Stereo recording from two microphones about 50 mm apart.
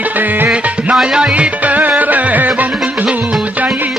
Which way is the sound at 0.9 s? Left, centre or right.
Centre.